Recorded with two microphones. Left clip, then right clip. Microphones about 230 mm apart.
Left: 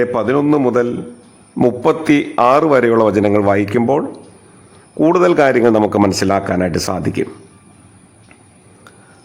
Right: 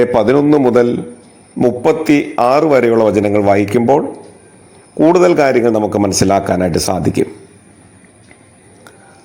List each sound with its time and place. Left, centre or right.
0.2 s a man's voice: centre
1.5 s a man's voice: centre
5.0 s a man's voice: centre